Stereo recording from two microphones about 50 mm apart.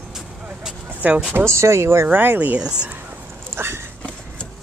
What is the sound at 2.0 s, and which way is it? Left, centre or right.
Speech, right.